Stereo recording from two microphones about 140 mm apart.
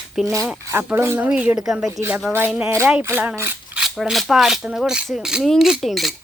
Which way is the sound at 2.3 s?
10° right (ahead or behind).